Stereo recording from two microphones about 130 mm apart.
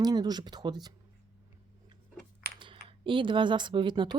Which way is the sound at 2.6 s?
40° right (ahead or behind).